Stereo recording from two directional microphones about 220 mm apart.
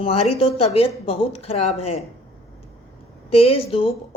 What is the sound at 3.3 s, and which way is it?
Speech, 25° left (ahead or behind).